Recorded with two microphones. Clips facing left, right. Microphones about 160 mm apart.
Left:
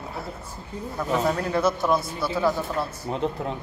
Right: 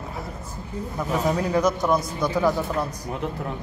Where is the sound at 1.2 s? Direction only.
15° right (ahead or behind).